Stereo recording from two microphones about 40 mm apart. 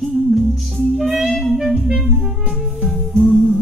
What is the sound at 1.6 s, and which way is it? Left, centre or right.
Clarinet, centre.